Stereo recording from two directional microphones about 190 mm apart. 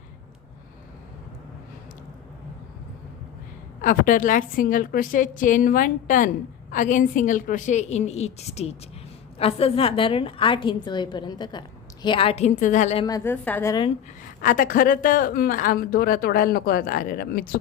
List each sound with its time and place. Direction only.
3.8 s a woman's voice: 45° left (ahead or behind)
13.1 s a woman's voice: 15° left (ahead or behind)
14.4 s a woman's voice: 45° left (ahead or behind)